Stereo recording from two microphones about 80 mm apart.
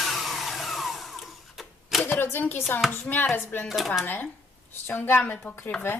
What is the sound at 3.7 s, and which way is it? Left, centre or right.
Speech, centre.